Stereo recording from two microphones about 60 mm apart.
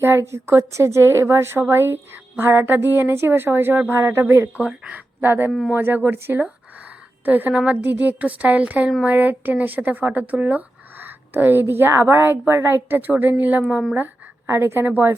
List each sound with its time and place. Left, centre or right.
0.0 s a woman's voice: right
4.7 s speech: right
5.2 s a woman's voice: right
5.5 s speech: centre
5.7 s a woman's voice: right
7.5 s a woman's voice: centre
7.8 s a woman's voice: right
14.4 s a woman's voice: right